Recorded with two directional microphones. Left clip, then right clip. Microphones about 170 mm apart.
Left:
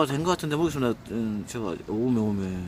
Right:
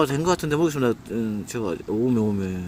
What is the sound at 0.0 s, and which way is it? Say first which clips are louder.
Speech: right 3 dB; 15° right (ahead or behind).